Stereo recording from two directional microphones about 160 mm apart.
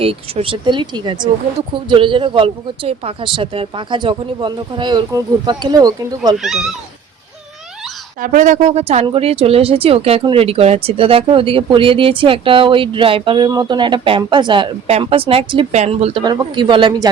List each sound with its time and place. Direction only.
0.0 s speech: 35° right (ahead or behind)
6.3 s speech: centre (ahead or behind)
8.2 s speech: 55° right (ahead or behind); by 16.2 s 40° right (ahead or behind)
16.2 s speech: 30° right (ahead or behind)